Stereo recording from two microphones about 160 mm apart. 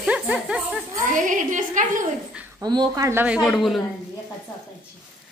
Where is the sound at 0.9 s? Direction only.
55° right (ahead or behind).